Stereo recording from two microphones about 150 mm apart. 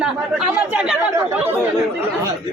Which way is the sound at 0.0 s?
5° right (ahead or behind).